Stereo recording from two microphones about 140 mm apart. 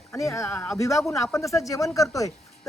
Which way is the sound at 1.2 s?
20° left (ahead or behind).